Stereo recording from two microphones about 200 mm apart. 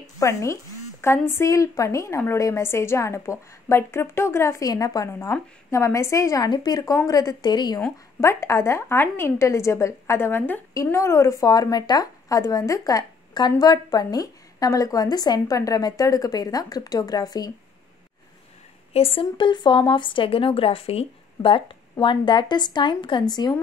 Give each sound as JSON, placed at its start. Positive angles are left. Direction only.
{"t": 0.2, "sound": "a woman's voice", "side_deg": 15}
{"t": 18.9, "sound": "a woman's voice", "side_deg": 25}